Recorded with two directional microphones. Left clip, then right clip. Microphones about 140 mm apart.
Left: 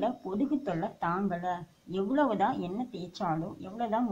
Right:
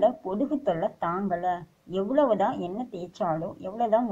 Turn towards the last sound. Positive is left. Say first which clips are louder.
# right 7 dB
turn(degrees=-10)  # may be behind; listen again after turning